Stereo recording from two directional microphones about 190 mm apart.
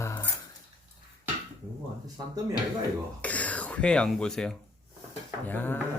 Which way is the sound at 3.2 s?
10° left (ahead or behind).